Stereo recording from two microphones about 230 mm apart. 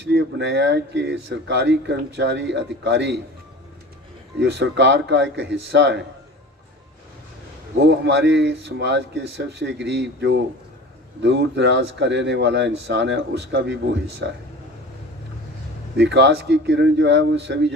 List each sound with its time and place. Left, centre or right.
0.1 s speech: right
4.4 s speech: right
7.9 s speech: right
16.0 s speech: right